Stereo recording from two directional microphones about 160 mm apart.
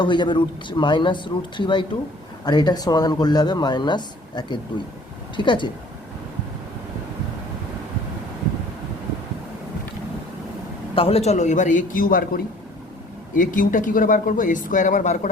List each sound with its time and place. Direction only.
0.0 s speech: 30° left (ahead or behind)
10.9 s a man's voice: 35° left (ahead or behind)